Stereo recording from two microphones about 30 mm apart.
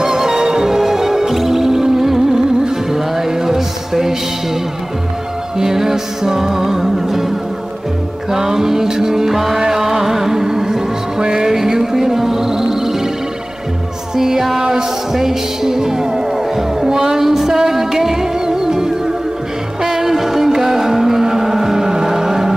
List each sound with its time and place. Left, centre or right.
0.0 s music: centre
2.9 s mantra: centre
5.6 s music: centre
14.1 s music: centre
14.6 s a sound: right
15.1 s music: centre